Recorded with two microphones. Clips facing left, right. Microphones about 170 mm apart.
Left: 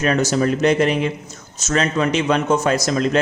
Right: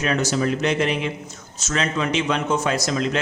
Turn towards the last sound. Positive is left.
turn(degrees=45)  # may be behind; listen again after turning